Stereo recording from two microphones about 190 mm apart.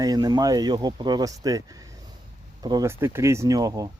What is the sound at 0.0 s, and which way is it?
Speech, 20° right (ahead or behind).